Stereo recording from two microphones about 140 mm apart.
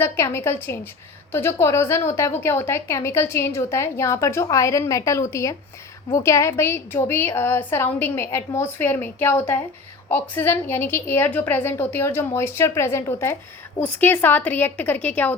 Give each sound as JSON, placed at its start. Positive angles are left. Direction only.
{"t": 0.0, "sound": "a woman's voice", "side_deg": 20}